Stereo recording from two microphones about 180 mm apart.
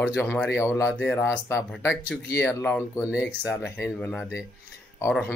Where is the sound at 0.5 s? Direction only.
15° left (ahead or behind).